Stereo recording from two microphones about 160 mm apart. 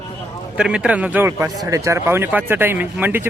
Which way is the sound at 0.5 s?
5° right (ahead or behind).